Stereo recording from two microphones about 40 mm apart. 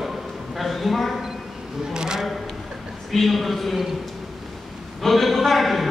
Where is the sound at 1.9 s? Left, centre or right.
Centre.